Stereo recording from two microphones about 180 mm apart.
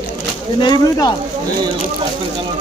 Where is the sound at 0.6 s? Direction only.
25° left (ahead or behind).